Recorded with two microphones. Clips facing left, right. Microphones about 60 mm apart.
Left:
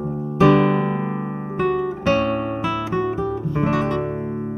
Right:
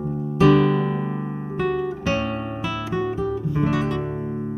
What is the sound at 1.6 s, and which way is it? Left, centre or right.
Guitar, left.